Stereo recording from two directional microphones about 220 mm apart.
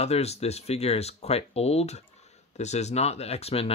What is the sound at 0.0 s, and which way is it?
Speech, 30° left (ahead or behind).